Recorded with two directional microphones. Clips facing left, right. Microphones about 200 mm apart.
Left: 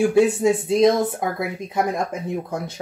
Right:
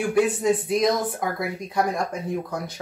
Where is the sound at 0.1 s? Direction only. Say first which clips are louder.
Left 4 dB; 25° left (ahead or behind).